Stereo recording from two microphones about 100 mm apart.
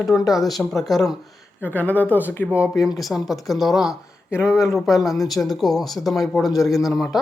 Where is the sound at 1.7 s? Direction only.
15° left (ahead or behind).